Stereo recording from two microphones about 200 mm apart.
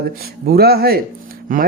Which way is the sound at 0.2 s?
50° right (ahead or behind).